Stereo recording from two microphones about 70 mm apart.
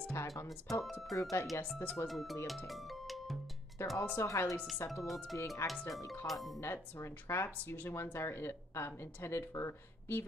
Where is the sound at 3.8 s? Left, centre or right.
Left.